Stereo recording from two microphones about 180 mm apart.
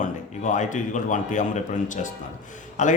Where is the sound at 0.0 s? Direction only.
45° left (ahead or behind).